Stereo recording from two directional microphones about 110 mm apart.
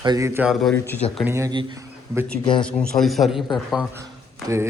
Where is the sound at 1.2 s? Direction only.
25° right (ahead or behind).